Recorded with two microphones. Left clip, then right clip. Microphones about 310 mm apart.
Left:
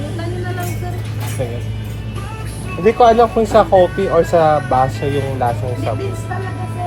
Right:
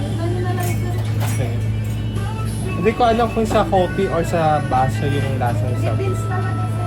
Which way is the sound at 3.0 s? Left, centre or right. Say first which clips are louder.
Left 7 dB; left.